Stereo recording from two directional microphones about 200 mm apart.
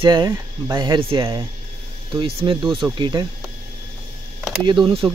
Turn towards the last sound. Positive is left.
turn(degrees=-25)  # may be behind; listen again after turning